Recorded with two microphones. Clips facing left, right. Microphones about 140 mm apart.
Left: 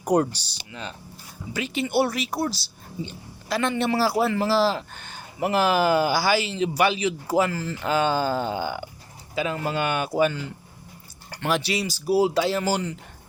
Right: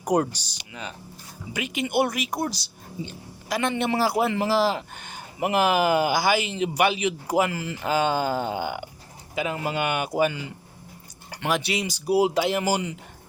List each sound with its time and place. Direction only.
0.0 s a man's voice: 10° right (ahead or behind)
11.3 s a sound: 10° right (ahead or behind)
11.7 s speech: 20° right (ahead or behind)